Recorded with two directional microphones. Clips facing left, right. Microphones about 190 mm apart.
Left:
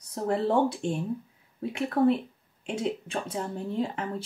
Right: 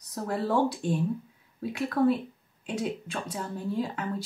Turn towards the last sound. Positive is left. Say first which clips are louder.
# left 1 dB
turn(degrees=25)  # may be behind; listen again after turning